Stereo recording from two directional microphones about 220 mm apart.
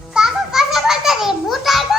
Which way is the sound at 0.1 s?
Centre (ahead or behind).